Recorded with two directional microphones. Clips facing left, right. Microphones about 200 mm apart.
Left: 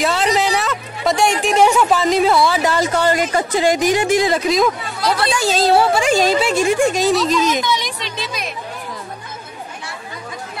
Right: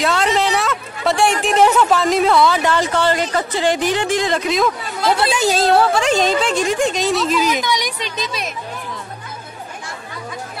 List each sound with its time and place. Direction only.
0.0 s a woman's voice: centre (ahead or behind)
5.3 s a woman's voice: 20° right (ahead or behind)
5.6 s a woman's voice: 5° left (ahead or behind); by 7.9 s 10° right (ahead or behind)